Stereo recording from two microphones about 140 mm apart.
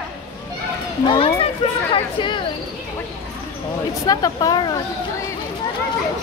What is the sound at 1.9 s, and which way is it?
Speech, 35° left (ahead or behind).